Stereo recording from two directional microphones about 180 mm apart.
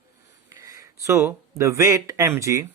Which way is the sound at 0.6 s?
20° right (ahead or behind).